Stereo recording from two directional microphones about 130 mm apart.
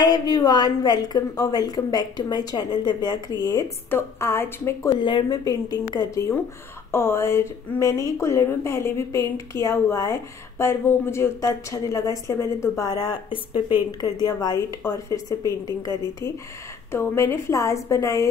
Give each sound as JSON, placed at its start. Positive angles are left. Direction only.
{"t": 0.0, "sound": "a woman's voice", "side_deg": 30}
{"t": 3.9, "sound": "a woman's voice", "side_deg": 20}
{"t": 4.9, "sound": "a woman's voice", "side_deg": 35}
{"t": 16.9, "sound": "a woman's voice", "side_deg": 20}